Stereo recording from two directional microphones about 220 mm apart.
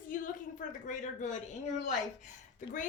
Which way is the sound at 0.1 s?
40° left (ahead or behind).